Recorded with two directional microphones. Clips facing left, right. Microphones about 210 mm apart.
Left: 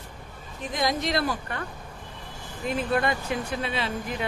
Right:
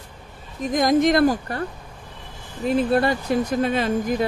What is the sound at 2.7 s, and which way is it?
Speech, 35° right (ahead or behind).